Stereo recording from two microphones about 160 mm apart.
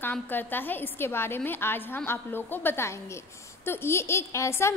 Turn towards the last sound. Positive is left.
turn(degrees=15)  # may be behind; listen again after turning